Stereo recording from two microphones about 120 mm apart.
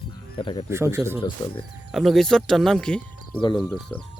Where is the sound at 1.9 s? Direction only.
Centre (ahead or behind).